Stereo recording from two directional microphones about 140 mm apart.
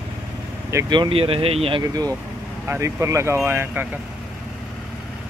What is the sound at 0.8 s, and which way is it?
Speech, 35° right (ahead or behind).